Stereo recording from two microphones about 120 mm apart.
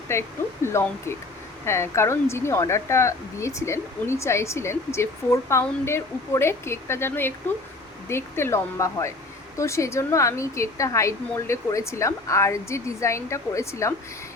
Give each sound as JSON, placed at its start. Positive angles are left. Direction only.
{"t": 0.1, "sound": "speech", "side_deg": 20}